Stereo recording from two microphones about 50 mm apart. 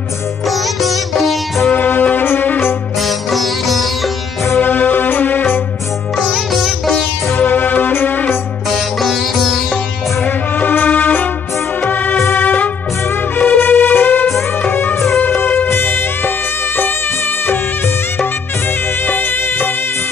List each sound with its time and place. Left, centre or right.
0.5 s sitar: centre
1.7 s music: left
3.3 s sitar: centre
4.6 s music: left
6.1 s sitar: centre
7.3 s music: left
9.0 s sitar: centre
10.2 s music: left
19.0 s music: left